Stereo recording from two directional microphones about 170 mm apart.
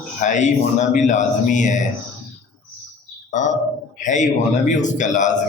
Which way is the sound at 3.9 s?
45° left (ahead or behind).